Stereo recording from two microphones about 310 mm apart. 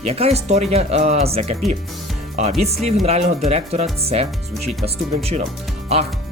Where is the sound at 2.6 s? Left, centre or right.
Right.